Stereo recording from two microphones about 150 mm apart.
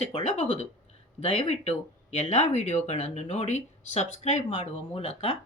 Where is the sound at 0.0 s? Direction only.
45° left (ahead or behind).